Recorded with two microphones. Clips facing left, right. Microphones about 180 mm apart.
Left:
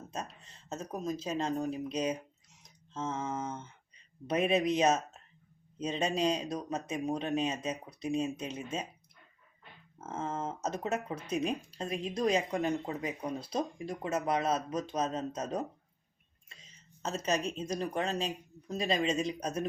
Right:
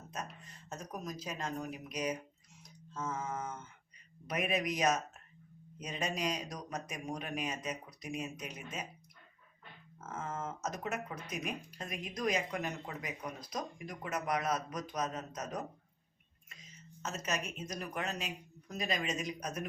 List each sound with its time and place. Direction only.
0.1 s speech: 30° left (ahead or behind)
2.6 s a sound: 25° left (ahead or behind)
4.3 s speech: 30° left (ahead or behind)
10.0 s speech: 30° left (ahead or behind)